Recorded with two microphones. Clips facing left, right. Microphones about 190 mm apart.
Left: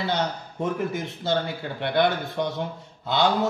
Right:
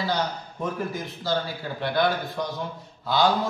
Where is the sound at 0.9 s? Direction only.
25° left (ahead or behind).